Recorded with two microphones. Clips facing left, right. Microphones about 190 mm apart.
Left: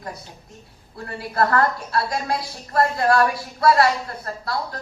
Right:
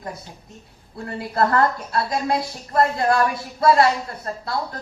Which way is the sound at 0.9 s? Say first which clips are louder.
Right 1 dB; 20° right (ahead or behind).